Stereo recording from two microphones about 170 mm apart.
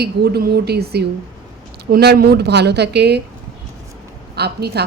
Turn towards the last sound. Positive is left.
turn(degrees=-75)  # may be behind; listen again after turning